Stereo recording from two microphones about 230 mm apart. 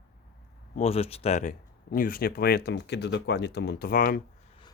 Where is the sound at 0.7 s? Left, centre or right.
Left.